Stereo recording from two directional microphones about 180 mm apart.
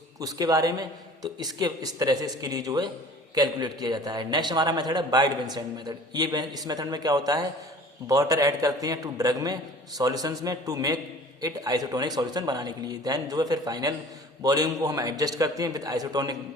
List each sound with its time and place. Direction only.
0.2 s a man's voice: 20° right (ahead or behind)